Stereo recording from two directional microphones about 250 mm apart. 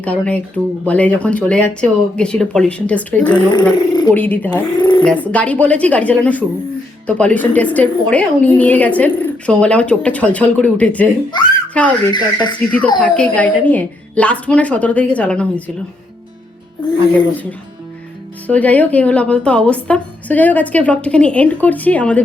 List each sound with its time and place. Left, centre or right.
0.0 s a woman's voice: centre
4.8 s speech: centre
5.0 s a woman's voice: centre
11.3 s speech: centre
11.7 s speech: centre
12.1 s speech: centre
12.5 s a woman's voice: centre
18.4 s a woman's voice: centre